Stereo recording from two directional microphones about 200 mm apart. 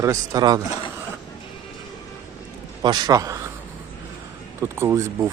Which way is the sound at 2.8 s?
20° right (ahead or behind).